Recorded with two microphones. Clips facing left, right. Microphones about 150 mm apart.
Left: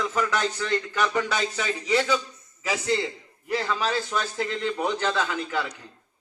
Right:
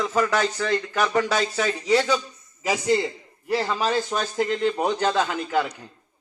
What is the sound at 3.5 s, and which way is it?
A man's voice, 35° right (ahead or behind).